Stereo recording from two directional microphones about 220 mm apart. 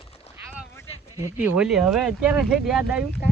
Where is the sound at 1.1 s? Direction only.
10° right (ahead or behind).